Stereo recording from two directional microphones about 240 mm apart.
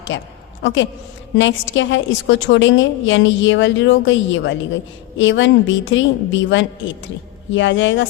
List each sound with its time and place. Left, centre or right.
0.1 s a woman's voice: left